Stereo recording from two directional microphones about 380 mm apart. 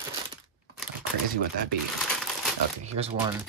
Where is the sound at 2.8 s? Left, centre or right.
Centre.